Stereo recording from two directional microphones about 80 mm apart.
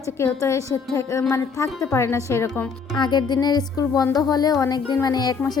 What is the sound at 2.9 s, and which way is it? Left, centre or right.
A woman's voice, left.